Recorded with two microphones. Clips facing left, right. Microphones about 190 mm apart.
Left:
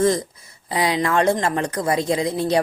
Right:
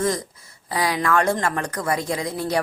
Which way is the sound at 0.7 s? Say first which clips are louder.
Left 1 dB; 20° left (ahead or behind).